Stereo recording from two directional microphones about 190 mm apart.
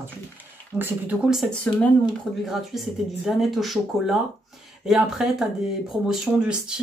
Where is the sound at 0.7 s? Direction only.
10° right (ahead or behind).